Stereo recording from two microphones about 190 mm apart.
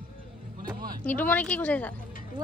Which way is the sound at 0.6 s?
50° right (ahead or behind).